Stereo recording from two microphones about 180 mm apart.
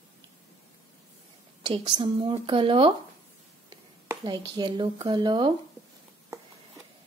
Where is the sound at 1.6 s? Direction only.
25° right (ahead or behind).